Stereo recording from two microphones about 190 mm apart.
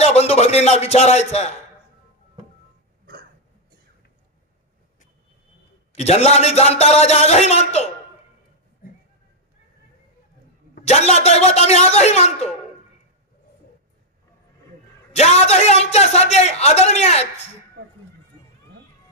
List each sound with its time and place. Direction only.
0.0 s a man's voice: 35° left (ahead or behind)
5.9 s a man's voice: 35° left (ahead or behind)
10.8 s a man's voice: 35° left (ahead or behind)
15.1 s a man's voice: 35° left (ahead or behind)